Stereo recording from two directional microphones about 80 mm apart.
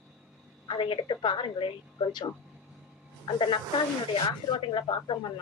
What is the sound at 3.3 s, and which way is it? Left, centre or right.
A woman's voice, left.